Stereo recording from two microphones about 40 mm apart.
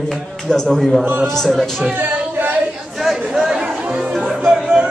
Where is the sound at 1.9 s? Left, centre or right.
Right.